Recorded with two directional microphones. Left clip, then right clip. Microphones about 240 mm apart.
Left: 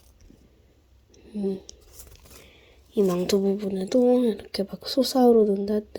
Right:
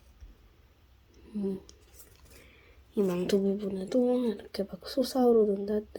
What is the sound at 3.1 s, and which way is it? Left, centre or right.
Speech, centre.